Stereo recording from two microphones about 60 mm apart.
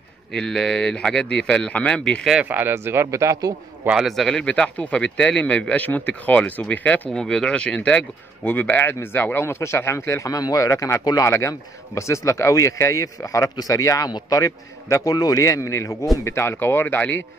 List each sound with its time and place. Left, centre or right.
0.3 s speech: centre
2.4 s speech: right
2.7 s speech: right
3.1 s speech: right
3.9 s speech: centre
4.3 s speech: centre
7.1 s speech: centre
8.5 s speech: left
10.3 s speech: left
15.0 s speech: left
15.4 s speech: left
16.3 s speech: left
16.8 s speech: left